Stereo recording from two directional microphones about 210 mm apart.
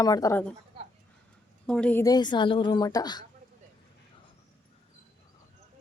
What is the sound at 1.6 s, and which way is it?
A woman's voice, 5° left (ahead or behind).